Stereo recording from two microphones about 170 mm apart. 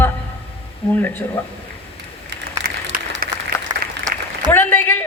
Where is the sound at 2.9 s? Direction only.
60° right (ahead or behind).